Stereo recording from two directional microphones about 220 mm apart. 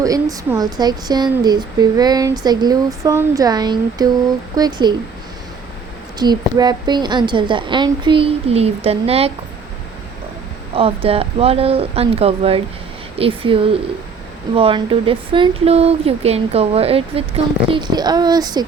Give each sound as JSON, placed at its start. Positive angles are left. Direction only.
{"t": 0.0, "sound": "speech", "side_deg": -15}
{"t": 6.1, "sound": "speech", "side_deg": -20}
{"t": 10.8, "sound": "speech", "side_deg": -25}